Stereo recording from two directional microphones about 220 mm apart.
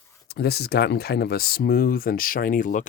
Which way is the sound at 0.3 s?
45° left (ahead or behind).